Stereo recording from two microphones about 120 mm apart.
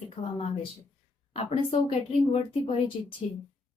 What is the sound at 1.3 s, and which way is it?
A woman's voice, 60° left (ahead or behind).